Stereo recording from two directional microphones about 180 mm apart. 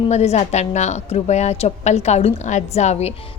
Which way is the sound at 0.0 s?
35° left (ahead or behind).